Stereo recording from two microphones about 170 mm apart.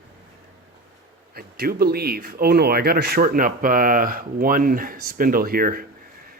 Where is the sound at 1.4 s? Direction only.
65° right (ahead or behind).